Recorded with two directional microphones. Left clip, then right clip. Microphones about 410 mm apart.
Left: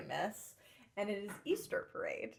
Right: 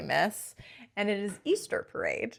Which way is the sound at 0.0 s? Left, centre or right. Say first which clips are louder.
Right 12 dB; right.